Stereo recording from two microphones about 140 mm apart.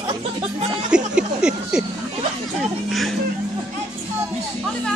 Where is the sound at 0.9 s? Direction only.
5° right (ahead or behind).